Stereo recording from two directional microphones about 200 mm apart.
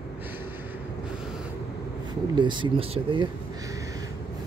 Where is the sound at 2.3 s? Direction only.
25° right (ahead or behind).